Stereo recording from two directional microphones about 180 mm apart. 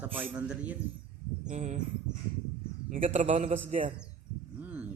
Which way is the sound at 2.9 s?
45° right (ahead or behind).